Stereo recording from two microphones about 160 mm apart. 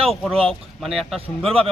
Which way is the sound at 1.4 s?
35° right (ahead or behind).